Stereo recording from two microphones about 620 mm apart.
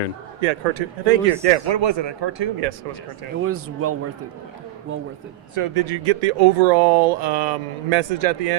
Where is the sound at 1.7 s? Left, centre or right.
Right.